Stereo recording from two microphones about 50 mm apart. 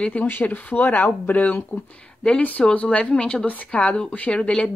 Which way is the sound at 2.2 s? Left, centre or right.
Left.